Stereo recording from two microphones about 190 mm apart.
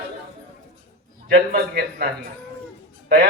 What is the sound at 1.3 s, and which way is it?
Speech, 55° right (ahead or behind).